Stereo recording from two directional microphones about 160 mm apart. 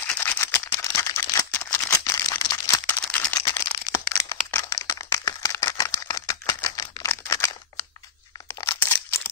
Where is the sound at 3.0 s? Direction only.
10° left (ahead or behind).